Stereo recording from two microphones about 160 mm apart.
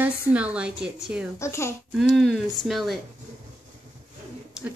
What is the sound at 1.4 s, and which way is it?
Speech, 15° left (ahead or behind).